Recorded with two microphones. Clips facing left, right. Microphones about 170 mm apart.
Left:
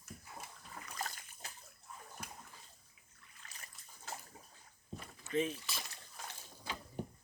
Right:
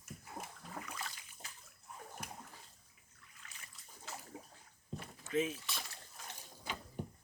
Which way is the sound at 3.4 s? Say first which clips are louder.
Left 2 dB; 40° left (ahead or behind).